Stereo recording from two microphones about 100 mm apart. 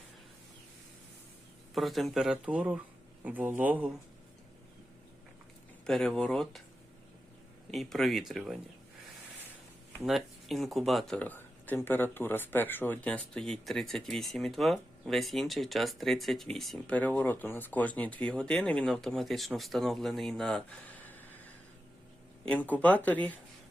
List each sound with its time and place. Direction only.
1.7 s speech: centre (ahead or behind); by 3.9 s 15° right (ahead or behind)
5.8 s speech: 5° left (ahead or behind)
7.7 s speech: centre (ahead or behind)
10.1 s speech: centre (ahead or behind)
11.2 s speech: 15° left (ahead or behind)
13.1 s speech: 10° left (ahead or behind)
20.8 s a sound: 20° left (ahead or behind)
22.4 s speech: 15° left (ahead or behind)